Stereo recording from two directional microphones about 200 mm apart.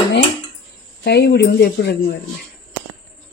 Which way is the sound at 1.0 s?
55° left (ahead or behind).